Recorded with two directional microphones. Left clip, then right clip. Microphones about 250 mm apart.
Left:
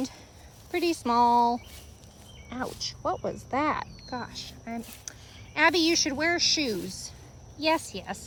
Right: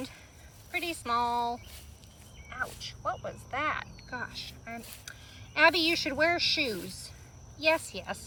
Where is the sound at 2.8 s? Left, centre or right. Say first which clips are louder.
Left 5 dB; left.